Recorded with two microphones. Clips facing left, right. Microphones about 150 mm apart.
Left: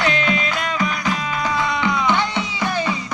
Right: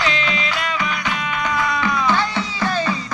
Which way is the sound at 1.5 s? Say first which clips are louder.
Even; 20° left (ahead or behind).